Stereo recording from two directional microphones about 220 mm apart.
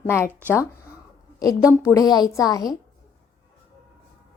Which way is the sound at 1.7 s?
10° left (ahead or behind).